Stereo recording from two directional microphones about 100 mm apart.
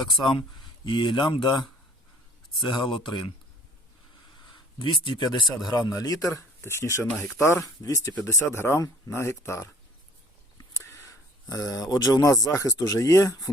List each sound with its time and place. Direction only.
0.9 s speech: 55° left (ahead or behind)
4.8 s speech: 55° left (ahead or behind); by 6.2 s 35° left (ahead or behind)
6.3 s speech: 25° left (ahead or behind)